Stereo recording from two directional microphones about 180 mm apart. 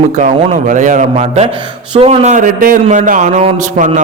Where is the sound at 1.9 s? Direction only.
35° right (ahead or behind).